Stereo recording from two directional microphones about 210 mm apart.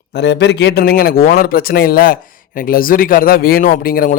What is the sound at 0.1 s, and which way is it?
Speech, 55° left (ahead or behind).